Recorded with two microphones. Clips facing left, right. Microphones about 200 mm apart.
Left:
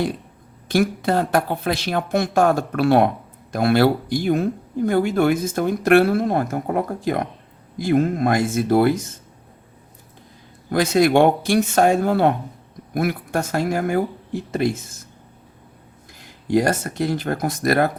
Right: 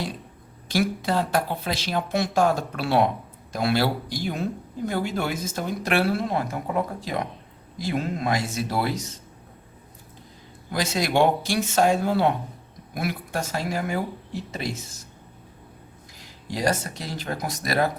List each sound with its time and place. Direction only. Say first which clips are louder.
0.7 s speech: left 5 dB; 55° left (ahead or behind)
10.7 s speech: left 9 dB; 55° left (ahead or behind)
16.2 s speech: left 7 dB; 55° left (ahead or behind)